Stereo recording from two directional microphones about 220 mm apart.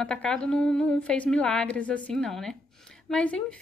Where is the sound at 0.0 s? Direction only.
5° left (ahead or behind).